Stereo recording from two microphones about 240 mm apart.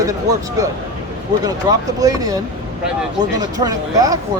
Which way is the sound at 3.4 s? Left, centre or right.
Centre.